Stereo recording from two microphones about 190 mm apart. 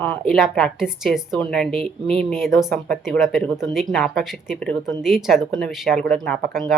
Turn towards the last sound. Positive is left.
turn(degrees=0)  # may be behind; listen again after turning